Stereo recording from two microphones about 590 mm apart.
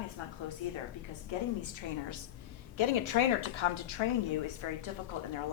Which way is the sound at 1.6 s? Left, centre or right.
Left.